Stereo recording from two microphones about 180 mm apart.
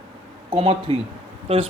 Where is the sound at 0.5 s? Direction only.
35° right (ahead or behind).